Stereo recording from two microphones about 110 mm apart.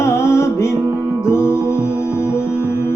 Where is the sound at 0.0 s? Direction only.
25° left (ahead or behind).